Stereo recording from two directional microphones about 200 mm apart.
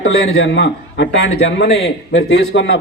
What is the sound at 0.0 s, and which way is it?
A man's voice, 75° left (ahead or behind).